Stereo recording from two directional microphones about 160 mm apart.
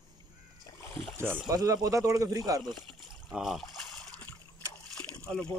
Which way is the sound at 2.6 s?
Centre (ahead or behind).